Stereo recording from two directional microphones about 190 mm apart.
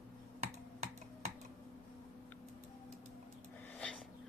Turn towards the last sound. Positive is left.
turn(degrees=5)  # may be behind; listen again after turning